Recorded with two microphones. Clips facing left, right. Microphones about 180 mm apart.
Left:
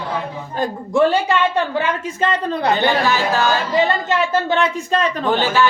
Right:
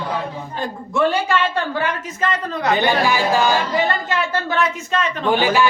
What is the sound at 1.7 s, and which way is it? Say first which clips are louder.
Speech: left 2 dB; 25° left (ahead or behind).